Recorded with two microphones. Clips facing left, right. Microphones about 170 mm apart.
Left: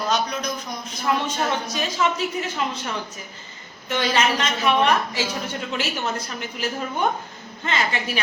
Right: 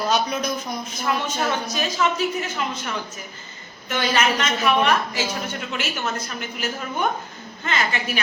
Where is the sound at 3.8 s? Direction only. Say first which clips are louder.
Even; 30° left (ahead or behind).